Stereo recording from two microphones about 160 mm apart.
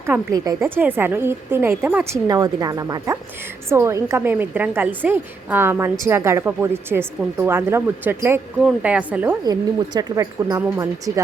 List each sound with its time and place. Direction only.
0.0 s a woman's voice: 15° right (ahead or behind)
2.2 s a woman's voice: 20° right (ahead or behind)
9.4 s speech: 25° right (ahead or behind)